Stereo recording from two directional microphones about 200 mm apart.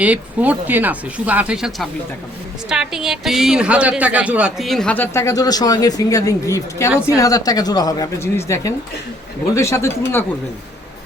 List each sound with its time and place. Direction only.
0.0 s speech: 5° right (ahead or behind); by 10.2 s 10° left (ahead or behind)